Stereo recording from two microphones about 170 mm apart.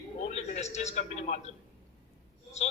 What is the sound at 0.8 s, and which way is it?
Speech, 40° left (ahead or behind).